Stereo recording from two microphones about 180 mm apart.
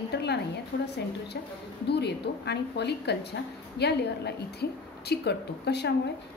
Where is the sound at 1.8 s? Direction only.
70° left (ahead or behind).